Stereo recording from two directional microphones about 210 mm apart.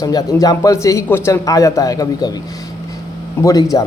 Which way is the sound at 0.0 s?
15° left (ahead or behind).